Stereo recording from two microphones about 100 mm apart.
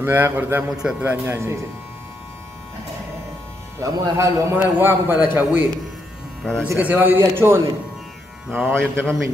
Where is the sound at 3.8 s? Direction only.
30° right (ahead or behind).